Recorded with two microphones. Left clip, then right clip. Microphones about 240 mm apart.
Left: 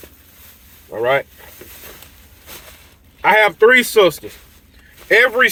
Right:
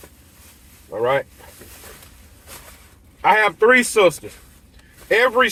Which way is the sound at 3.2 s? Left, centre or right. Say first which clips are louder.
Left 4 dB; centre.